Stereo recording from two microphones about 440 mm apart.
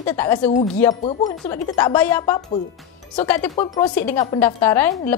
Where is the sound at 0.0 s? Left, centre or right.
Centre.